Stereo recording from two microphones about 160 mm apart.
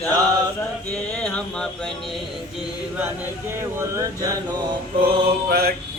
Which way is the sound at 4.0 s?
25° right (ahead or behind).